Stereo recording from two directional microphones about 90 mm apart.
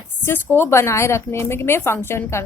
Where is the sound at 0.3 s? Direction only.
25° left (ahead or behind).